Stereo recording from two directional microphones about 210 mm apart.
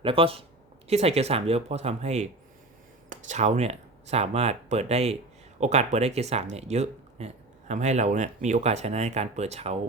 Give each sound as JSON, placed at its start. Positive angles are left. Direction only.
{"t": 0.0, "sound": "speech", "side_deg": -25}